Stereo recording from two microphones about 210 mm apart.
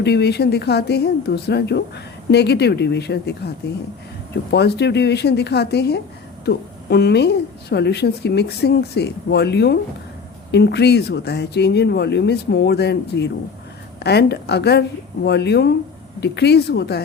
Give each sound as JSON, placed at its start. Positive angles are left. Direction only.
{"t": 0.0, "sound": "a woman's voice", "side_deg": 50}
{"t": 4.5, "sound": "a woman's voice", "side_deg": 50}